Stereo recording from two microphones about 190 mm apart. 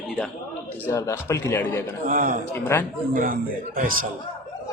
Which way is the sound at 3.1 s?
45° right (ahead or behind).